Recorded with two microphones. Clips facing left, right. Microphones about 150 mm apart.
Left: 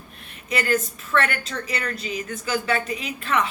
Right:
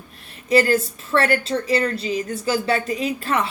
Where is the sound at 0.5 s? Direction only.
35° right (ahead or behind).